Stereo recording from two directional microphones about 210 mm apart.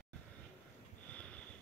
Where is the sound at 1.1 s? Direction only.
5° left (ahead or behind).